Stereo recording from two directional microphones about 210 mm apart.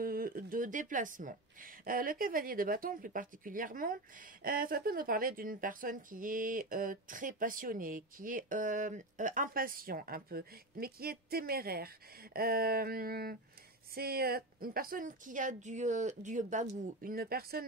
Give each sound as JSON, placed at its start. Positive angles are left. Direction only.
{"t": 0.0, "sound": "a woman's voice", "side_deg": -45}